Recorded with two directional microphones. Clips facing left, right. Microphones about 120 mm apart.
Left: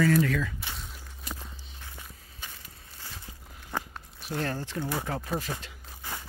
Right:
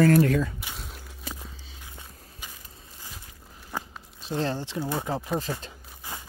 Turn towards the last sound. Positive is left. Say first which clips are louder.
# right 3 dB
turn(degrees=-20)  # may be behind; listen again after turning